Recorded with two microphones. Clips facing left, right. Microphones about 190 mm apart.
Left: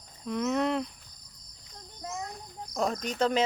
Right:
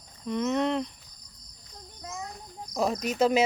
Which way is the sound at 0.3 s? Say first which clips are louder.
Right 1 dB; centre (ahead or behind).